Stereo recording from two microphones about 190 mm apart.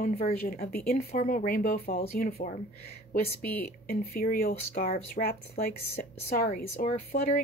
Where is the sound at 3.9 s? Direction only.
50° left (ahead or behind).